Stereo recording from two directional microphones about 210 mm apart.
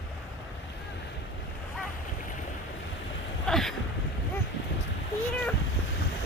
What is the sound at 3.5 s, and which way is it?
Boat, centre (ahead or behind).